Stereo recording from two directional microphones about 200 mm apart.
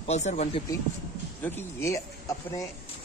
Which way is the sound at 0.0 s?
35° left (ahead or behind).